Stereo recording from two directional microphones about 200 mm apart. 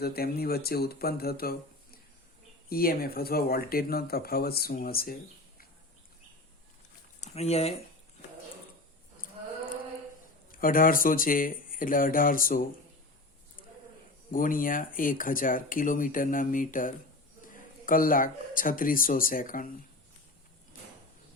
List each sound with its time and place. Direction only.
0.0 s speech: 50° left (ahead or behind)
7.2 s speech: 30° left (ahead or behind)
10.5 s speech: 45° left (ahead or behind)
14.3 s speech: 45° left (ahead or behind)